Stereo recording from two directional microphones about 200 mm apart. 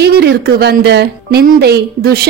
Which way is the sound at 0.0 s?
55° right (ahead or behind).